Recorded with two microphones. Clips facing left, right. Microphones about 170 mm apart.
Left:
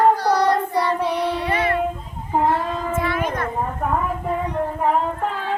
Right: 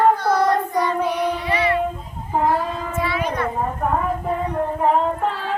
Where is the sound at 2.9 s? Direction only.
50° left (ahead or behind).